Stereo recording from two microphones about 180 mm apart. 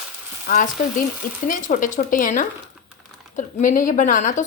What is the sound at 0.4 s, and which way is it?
Speech, 45° left (ahead or behind).